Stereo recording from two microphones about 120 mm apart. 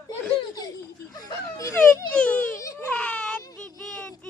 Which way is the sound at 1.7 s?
15° left (ahead or behind).